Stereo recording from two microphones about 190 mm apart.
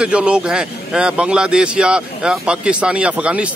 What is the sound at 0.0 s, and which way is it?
A man's voice, 5° right (ahead or behind).